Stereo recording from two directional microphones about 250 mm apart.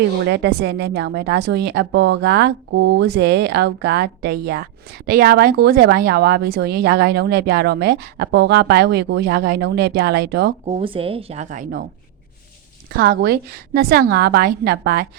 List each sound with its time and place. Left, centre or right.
0.3 s a woman's voice: right
10.7 s a woman's voice: right
12.9 s a woman's voice: right